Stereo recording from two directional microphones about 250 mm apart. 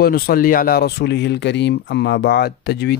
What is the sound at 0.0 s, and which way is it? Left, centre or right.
Speech, left.